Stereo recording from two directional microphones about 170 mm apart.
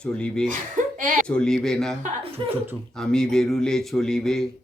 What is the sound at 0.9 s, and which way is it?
Speech, 50° right (ahead or behind).